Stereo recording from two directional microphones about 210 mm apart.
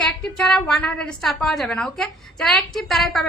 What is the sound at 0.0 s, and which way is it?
A woman's voice, 5° left (ahead or behind).